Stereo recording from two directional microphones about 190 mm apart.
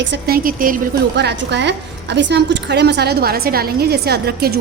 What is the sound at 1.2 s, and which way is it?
A woman's voice, 65° right (ahead or behind).